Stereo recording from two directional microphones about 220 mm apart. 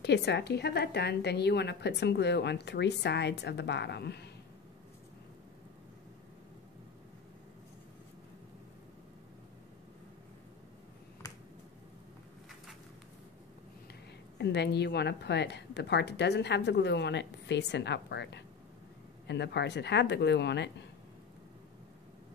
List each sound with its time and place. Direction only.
0.0 s a woman's voice: 50° left (ahead or behind)
14.4 s a woman's voice: 50° left (ahead or behind)